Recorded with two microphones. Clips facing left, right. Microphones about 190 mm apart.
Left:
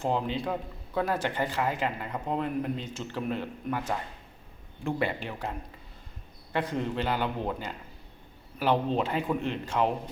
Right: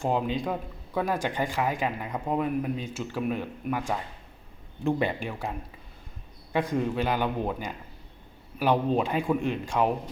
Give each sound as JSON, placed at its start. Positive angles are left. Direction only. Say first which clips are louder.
{"t": 0.0, "sound": "speech", "louder": "right 2 dB", "side_deg": -15}
{"t": 6.5, "sound": "speech", "louder": "right 3 dB", "side_deg": -15}